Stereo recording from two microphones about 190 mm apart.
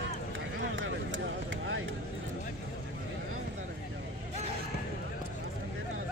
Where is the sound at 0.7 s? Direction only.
90° right.